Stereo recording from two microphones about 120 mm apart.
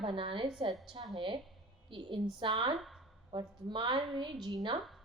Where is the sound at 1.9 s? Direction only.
45° right (ahead or behind).